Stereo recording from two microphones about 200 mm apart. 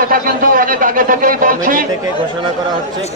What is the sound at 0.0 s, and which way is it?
A man's voice, 45° right (ahead or behind).